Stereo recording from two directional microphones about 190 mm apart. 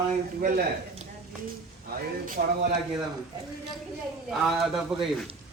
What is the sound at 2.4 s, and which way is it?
Speech, 50° right (ahead or behind).